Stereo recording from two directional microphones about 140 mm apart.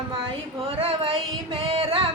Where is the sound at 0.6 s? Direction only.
45° right (ahead or behind).